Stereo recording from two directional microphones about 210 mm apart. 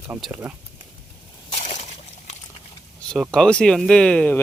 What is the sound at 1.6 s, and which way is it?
Slosh, 30° left (ahead or behind).